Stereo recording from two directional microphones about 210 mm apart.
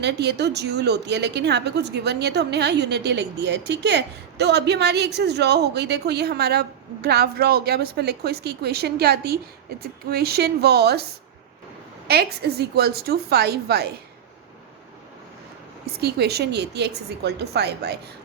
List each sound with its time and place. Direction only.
0.0 s a woman's voice: 55° right (ahead or behind)
12.0 s a woman's voice: 50° right (ahead or behind)
16.0 s a woman's voice: 50° right (ahead or behind)